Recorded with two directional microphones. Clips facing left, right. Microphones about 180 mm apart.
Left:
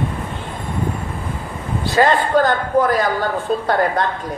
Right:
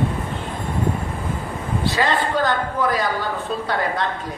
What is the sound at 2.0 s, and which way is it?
A woman's voice, 45° left (ahead or behind).